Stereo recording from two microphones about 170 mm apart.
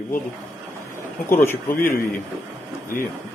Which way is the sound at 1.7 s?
60° left (ahead or behind).